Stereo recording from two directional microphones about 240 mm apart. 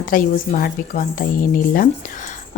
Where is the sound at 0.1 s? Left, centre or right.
Left.